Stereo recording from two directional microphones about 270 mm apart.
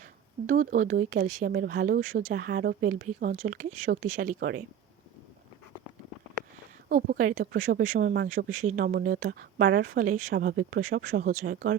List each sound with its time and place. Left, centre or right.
0.0 s speech: right
6.8 s speech: right